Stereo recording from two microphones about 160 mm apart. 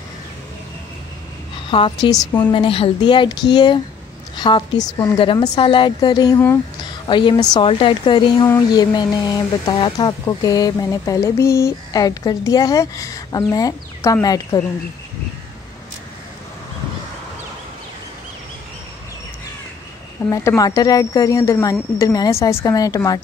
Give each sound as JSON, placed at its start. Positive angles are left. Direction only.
{"t": 1.7, "sound": "a woman's voice", "side_deg": 35}
{"t": 5.2, "sound": "speech", "side_deg": 30}
{"t": 20.2, "sound": "speech", "side_deg": 20}